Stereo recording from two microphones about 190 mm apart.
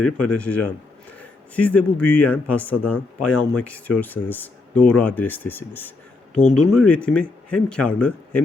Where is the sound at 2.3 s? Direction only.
10° left (ahead or behind).